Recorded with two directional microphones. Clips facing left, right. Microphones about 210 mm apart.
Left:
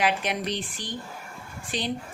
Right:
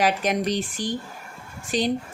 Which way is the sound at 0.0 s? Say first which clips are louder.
Right 4 dB; 40° right (ahead or behind).